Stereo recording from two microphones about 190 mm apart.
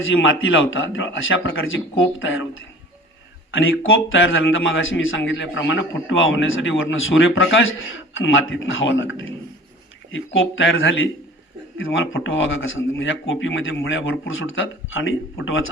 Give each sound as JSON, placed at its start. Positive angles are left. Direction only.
{"t": 0.2, "sound": "a man's voice", "side_deg": 85}
{"t": 3.5, "sound": "a man's voice", "side_deg": 90}
{"t": 13.0, "sound": "a man's voice", "side_deg": 75}
{"t": 13.8, "sound": "a man's voice", "side_deg": 90}